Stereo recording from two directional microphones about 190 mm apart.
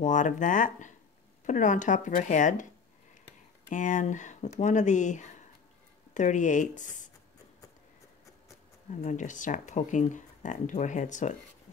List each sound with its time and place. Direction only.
0.0 s speech: 40° left (ahead or behind)
3.7 s speech: 40° left (ahead or behind)
9.0 s speech: 40° left (ahead or behind)